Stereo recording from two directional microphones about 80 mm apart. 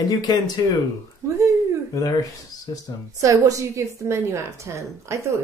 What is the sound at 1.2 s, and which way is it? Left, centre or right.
Speech, right.